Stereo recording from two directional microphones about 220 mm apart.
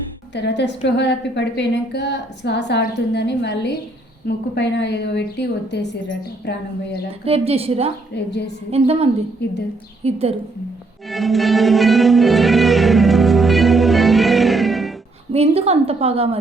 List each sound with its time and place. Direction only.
0.3 s a woman's voice: 50° left (ahead or behind)
7.3 s a woman's voice: 25° right (ahead or behind)
8.1 s a woman's voice: 50° left (ahead or behind)
8.7 s a woman's voice: 25° right (ahead or behind)
9.4 s a woman's voice: 50° left (ahead or behind)
10.0 s a woman's voice: 30° right (ahead or behind)
11.1 s music: centre (ahead or behind)
15.3 s a woman's voice: 25° right (ahead or behind)